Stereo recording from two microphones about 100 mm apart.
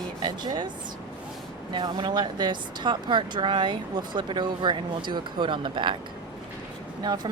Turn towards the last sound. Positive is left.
turn(degrees=-45)  # may be behind; listen again after turning